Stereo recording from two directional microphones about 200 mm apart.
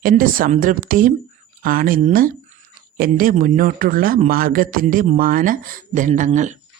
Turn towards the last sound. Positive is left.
turn(degrees=-35)  # may be behind; listen again after turning